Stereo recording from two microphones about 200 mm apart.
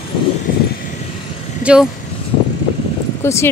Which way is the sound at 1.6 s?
5° right (ahead or behind).